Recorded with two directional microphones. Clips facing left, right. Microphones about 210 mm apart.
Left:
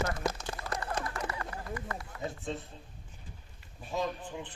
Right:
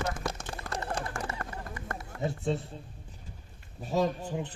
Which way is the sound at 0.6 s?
30° right (ahead or behind).